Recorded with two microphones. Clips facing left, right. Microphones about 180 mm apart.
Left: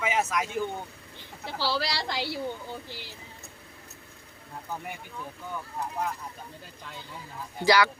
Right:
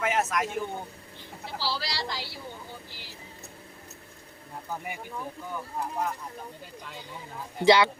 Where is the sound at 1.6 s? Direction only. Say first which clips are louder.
Left 4 dB; 60° left (ahead or behind).